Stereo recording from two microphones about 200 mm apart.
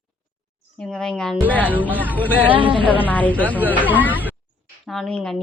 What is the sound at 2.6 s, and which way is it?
Speech, 25° right (ahead or behind).